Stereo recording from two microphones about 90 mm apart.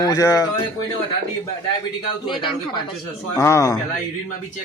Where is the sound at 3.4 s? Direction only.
35° left (ahead or behind).